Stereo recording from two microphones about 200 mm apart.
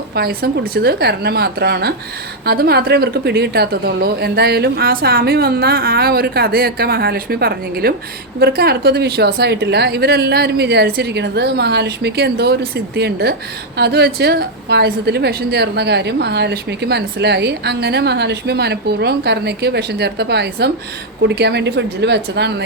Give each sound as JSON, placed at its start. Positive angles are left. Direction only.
{"t": 0.2, "sound": "a woman's voice", "side_deg": -50}